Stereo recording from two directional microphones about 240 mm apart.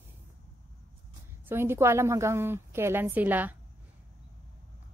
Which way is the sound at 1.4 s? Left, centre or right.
Centre.